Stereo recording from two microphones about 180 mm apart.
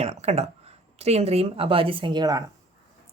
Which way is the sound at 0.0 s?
35° right (ahead or behind).